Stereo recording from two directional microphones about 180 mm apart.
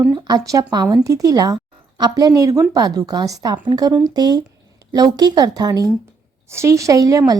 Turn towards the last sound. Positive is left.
turn(degrees=-20)  # may be behind; listen again after turning